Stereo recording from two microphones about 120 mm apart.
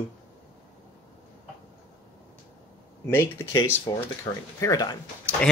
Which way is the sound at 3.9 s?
35° left (ahead or behind).